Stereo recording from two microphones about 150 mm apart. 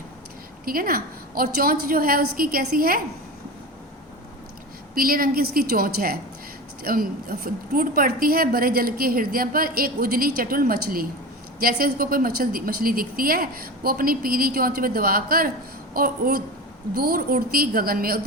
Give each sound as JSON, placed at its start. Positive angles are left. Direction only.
{"t": 0.6, "sound": "a woman's voice", "side_deg": -75}
{"t": 4.9, "sound": "a woman's voice", "side_deg": -75}